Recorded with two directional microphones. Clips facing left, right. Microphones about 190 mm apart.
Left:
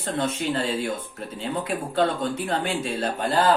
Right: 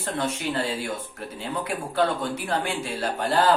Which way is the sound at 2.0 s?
20° left (ahead or behind).